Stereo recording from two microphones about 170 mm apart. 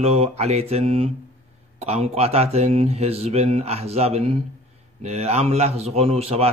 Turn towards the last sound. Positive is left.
turn(degrees=-35)  # may be behind; listen again after turning